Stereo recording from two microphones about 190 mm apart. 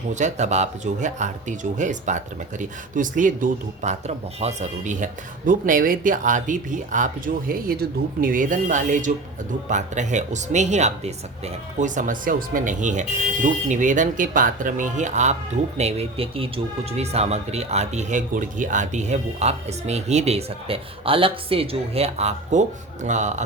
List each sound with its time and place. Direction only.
0.1 s speech: 40° right (ahead or behind)